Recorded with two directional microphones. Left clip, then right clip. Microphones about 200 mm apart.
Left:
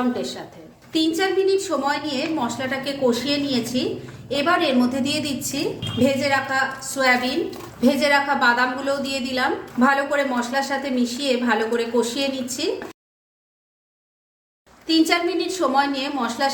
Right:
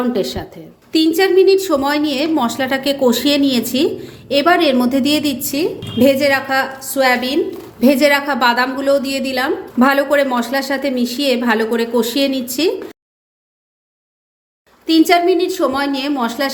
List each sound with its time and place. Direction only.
0.1 s a woman's voice: 45° right (ahead or behind)
4.3 s a woman's voice: 45° right (ahead or behind)
14.8 s a woman's voice: 35° right (ahead or behind)